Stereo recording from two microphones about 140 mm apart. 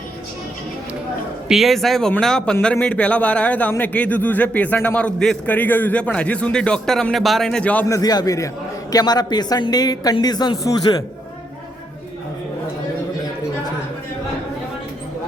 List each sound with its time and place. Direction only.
1.5 s speech: centre (ahead or behind)
7.9 s speech: 25° left (ahead or behind)